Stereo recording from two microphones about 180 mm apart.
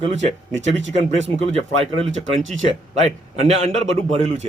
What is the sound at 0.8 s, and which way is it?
Speech, 90° right.